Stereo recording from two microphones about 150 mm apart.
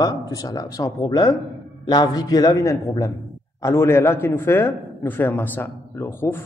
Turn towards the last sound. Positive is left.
turn(degrees=15)  # may be behind; listen again after turning